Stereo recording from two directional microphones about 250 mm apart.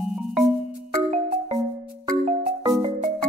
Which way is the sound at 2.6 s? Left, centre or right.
Right.